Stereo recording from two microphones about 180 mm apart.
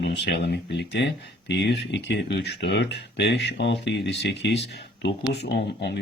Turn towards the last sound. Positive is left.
turn(degrees=75)  # may be behind; listen again after turning